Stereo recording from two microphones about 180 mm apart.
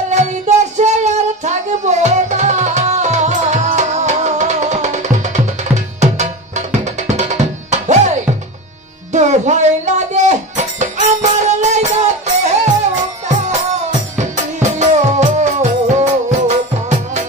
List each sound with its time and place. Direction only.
0.1 s music: 40° right (ahead or behind)
14.1 s music: 40° right (ahead or behind)